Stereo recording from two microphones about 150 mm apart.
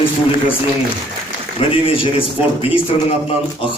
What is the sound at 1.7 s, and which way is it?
A man's voice, 35° left (ahead or behind).